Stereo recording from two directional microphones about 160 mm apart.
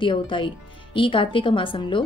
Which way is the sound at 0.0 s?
30° left (ahead or behind).